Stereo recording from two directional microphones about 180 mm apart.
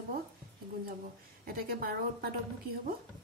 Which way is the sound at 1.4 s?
55° right (ahead or behind).